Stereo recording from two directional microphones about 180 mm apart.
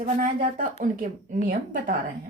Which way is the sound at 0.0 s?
45° right (ahead or behind).